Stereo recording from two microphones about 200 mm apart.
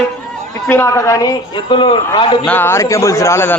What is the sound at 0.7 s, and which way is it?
A man's voice, 15° left (ahead or behind).